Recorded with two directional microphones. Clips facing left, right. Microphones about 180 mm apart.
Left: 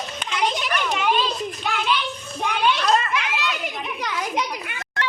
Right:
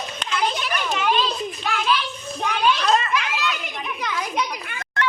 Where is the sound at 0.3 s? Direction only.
20° left (ahead or behind).